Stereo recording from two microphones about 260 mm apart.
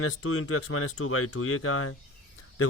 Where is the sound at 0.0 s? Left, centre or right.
Left.